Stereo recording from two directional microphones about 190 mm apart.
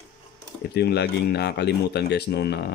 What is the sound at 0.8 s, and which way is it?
Speech, 60° left (ahead or behind).